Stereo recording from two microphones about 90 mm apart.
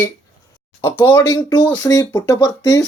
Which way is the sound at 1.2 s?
45° left (ahead or behind).